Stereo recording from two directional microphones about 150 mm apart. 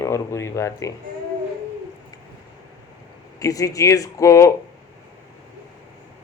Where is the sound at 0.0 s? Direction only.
20° left (ahead or behind).